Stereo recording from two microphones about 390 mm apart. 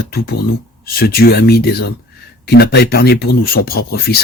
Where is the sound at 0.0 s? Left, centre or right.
Left.